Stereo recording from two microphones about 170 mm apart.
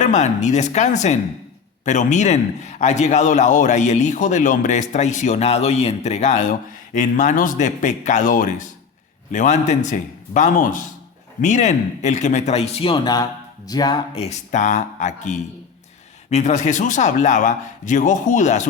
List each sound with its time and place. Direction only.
0.0 s a man's voice: 45° left (ahead or behind)